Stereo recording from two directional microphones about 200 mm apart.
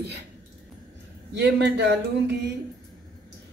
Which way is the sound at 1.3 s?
60° right (ahead or behind).